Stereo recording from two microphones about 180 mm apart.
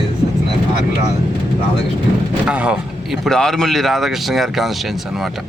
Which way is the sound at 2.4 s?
5° right (ahead or behind).